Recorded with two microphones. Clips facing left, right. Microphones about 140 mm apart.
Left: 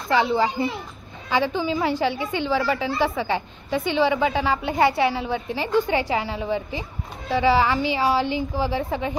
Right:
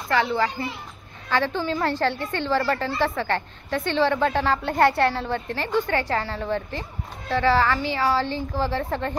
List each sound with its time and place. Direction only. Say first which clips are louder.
0.1 s a woman's voice: left 2 dB; 15° left (ahead or behind)